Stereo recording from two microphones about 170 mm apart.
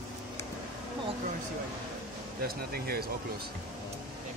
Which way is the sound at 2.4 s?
65° right (ahead or behind).